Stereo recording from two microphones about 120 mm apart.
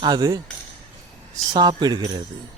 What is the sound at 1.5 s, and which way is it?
Speech, 35° right (ahead or behind).